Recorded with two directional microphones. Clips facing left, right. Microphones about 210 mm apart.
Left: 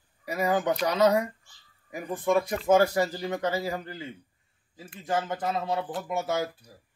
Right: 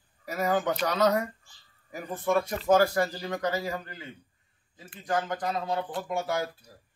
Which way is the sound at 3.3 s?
25° left (ahead or behind).